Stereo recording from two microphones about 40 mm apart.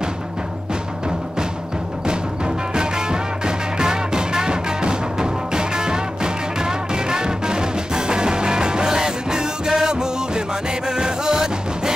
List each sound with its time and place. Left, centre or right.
2.7 s music: centre